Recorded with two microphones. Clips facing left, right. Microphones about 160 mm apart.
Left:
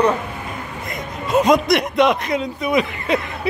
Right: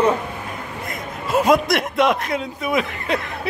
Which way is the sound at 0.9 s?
5° right (ahead or behind).